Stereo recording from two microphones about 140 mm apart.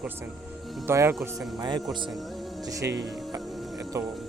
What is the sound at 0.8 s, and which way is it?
Speech, 15° right (ahead or behind).